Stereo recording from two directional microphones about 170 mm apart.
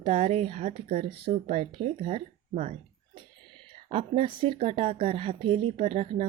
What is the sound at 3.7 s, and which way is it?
Speech, 30° right (ahead or behind).